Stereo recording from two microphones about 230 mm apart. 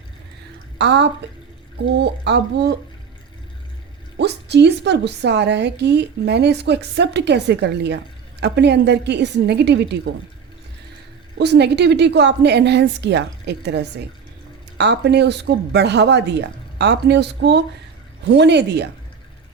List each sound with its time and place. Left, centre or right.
0.8 s a woman's voice: right
4.2 s a woman's voice: right
11.3 s a woman's voice: right